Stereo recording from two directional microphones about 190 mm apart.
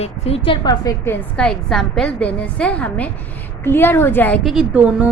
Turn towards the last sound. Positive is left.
turn(degrees=-5)  # may be behind; listen again after turning